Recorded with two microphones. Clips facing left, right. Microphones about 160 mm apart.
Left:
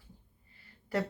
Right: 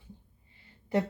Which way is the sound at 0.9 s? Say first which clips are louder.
Right 4 dB; 20° right (ahead or behind).